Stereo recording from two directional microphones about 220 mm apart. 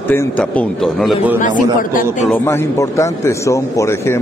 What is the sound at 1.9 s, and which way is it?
Speech, 40° left (ahead or behind).